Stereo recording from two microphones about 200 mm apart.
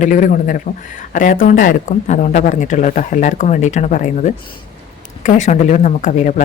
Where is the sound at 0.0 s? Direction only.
40° left (ahead or behind).